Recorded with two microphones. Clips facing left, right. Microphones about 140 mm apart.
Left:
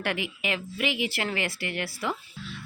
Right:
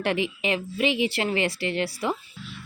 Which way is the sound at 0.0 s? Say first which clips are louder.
Right 5 dB; 25° right (ahead or behind).